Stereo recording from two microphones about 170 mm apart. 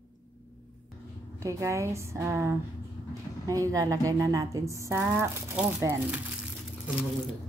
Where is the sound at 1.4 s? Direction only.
15° right (ahead or behind).